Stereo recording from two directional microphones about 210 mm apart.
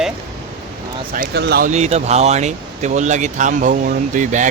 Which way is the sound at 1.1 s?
50° right (ahead or behind).